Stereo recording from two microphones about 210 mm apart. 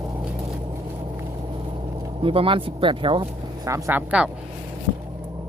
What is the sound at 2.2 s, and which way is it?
Speech, 25° right (ahead or behind).